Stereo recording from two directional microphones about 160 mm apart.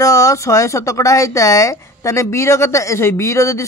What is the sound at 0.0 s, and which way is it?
Speech, 20° left (ahead or behind).